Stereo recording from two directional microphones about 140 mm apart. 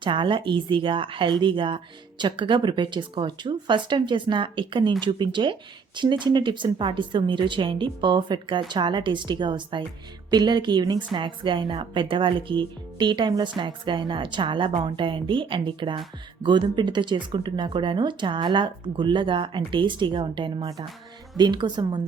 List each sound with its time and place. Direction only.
0.0 s speech: 35° right (ahead or behind)